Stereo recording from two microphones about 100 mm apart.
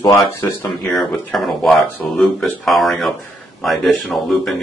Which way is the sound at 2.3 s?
Centre (ahead or behind).